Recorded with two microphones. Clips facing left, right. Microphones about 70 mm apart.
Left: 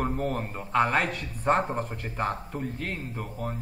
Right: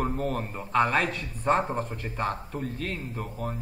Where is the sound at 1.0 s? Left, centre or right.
Left.